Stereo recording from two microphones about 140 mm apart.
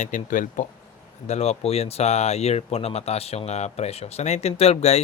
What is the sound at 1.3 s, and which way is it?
Speech, 50° left (ahead or behind).